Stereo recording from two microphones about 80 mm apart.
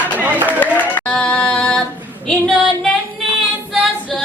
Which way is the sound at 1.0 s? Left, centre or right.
Centre.